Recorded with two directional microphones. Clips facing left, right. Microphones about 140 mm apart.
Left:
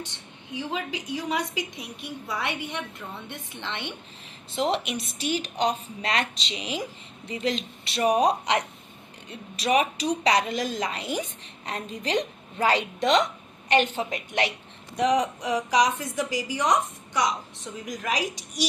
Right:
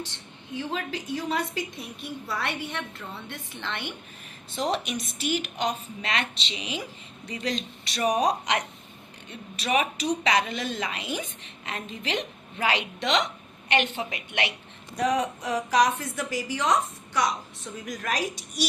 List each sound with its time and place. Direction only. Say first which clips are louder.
0.5 s a woman's voice: even; 15° left (ahead or behind); by 14.5 s 40° left (ahead or behind)
14.9 s a woman's voice: left 2 dB; 15° left (ahead or behind)